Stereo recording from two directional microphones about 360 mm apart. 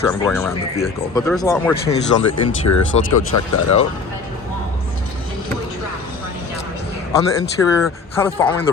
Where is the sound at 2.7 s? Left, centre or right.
Left.